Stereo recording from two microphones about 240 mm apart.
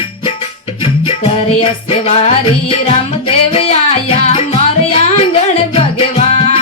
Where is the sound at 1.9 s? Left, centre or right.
Left.